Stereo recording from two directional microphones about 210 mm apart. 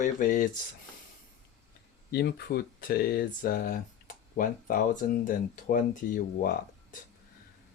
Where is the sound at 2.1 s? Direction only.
50° left (ahead or behind).